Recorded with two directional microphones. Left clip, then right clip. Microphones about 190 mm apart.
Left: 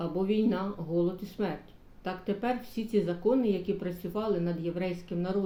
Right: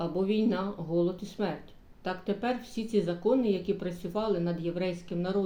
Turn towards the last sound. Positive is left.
turn(degrees=-10)  # may be behind; listen again after turning